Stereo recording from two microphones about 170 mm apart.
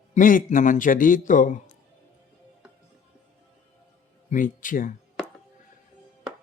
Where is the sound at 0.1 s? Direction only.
50° left (ahead or behind).